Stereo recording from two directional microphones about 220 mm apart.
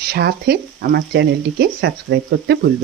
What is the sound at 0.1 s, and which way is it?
Speech, 45° right (ahead or behind).